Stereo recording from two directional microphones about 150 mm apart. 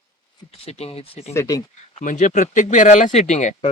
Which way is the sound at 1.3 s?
20° left (ahead or behind).